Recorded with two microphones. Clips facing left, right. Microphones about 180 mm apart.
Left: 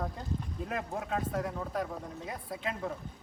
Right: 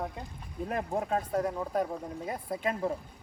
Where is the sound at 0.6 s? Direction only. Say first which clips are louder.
Right 6 dB; 40° right (ahead or behind).